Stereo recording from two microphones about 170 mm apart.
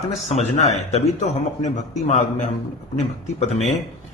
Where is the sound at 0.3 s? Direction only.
40° left (ahead or behind).